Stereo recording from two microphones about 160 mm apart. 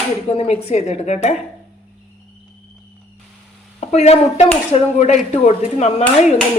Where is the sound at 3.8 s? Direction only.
45° left (ahead or behind).